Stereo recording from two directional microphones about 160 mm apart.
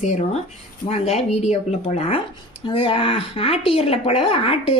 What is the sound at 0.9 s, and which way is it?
Speech, 40° left (ahead or behind).